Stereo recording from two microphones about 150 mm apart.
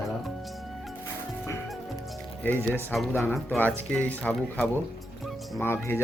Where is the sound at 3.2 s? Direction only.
Centre (ahead or behind).